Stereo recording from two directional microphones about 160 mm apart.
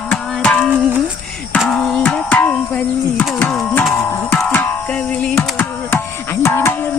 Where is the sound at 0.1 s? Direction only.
5° left (ahead or behind).